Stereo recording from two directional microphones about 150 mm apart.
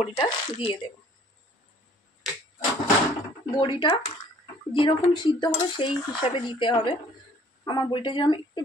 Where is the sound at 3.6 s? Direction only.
30° left (ahead or behind).